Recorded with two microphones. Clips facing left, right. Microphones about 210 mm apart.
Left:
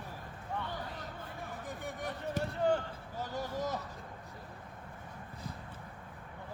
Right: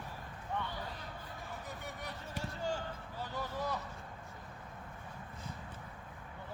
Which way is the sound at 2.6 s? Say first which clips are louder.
Left 8 dB; 60° left (ahead or behind).